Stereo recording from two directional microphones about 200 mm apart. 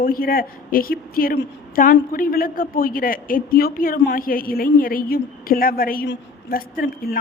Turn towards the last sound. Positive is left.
turn(degrees=45)  # may be behind; listen again after turning